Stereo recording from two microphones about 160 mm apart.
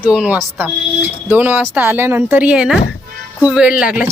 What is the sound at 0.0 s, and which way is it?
Speech, 10° right (ahead or behind).